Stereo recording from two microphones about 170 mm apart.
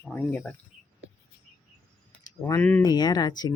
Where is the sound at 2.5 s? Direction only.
15° left (ahead or behind).